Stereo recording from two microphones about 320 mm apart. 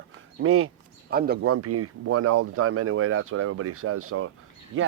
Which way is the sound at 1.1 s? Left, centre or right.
Right.